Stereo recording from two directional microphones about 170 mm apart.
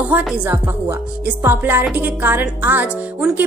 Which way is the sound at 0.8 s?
15° right (ahead or behind).